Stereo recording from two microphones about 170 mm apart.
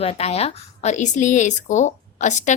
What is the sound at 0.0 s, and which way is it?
Speech, 35° left (ahead or behind).